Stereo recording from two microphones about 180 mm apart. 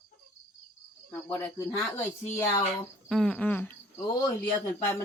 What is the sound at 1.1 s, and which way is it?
Speech, 10° left (ahead or behind).